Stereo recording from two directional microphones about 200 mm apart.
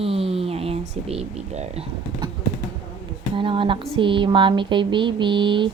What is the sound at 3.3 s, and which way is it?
Speech, 25° right (ahead or behind).